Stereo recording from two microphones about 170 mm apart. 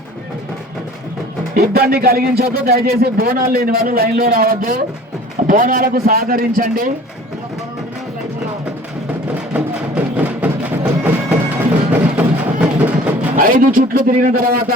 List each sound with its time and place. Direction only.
1.5 s speech: 65° right (ahead or behind)
9.2 s music: 5° right (ahead or behind)
13.7 s speech: 55° right (ahead or behind)